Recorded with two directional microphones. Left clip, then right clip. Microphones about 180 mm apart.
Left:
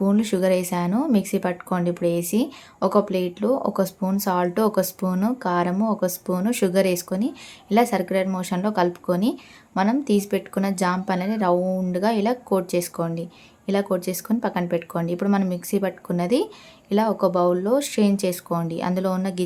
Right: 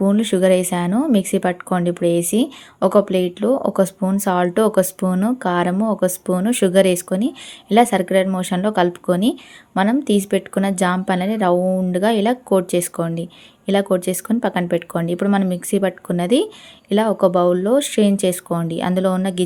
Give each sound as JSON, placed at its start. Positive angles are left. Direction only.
{"t": 0.0, "sound": "a woman's voice", "side_deg": -20}